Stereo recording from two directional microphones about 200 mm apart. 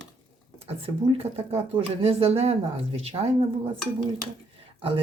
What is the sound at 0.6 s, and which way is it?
Speech, 30° right (ahead or behind).